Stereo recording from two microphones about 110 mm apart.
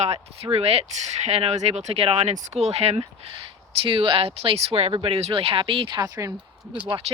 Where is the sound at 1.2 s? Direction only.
75° right (ahead or behind).